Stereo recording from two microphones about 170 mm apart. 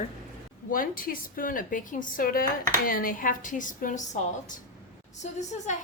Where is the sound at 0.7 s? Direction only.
55° left (ahead or behind).